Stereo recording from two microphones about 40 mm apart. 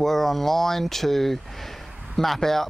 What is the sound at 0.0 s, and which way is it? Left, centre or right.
Speech, centre.